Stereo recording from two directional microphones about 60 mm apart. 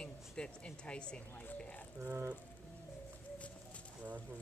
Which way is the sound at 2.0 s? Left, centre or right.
Right.